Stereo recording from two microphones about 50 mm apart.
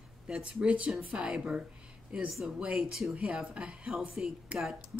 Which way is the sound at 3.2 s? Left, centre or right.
Centre.